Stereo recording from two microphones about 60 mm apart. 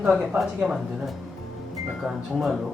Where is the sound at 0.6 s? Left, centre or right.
Centre.